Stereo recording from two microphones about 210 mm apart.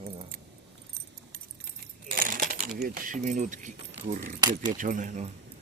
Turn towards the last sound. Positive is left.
turn(degrees=-35)  # may be behind; listen again after turning